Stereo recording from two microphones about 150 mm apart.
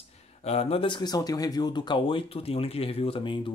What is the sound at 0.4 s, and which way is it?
Speech, 45° left (ahead or behind).